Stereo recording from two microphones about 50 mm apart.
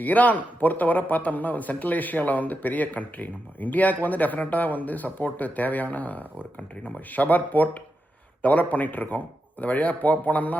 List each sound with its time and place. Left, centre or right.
0.0 s a man's voice: left